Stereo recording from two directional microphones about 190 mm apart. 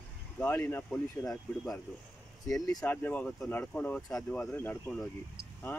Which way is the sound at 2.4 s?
15° left (ahead or behind).